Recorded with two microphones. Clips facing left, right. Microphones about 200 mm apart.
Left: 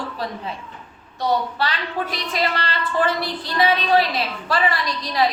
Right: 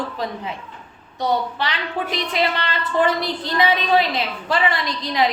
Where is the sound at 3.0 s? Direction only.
20° right (ahead or behind).